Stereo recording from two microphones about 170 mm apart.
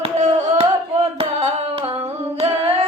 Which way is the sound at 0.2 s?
45° right (ahead or behind).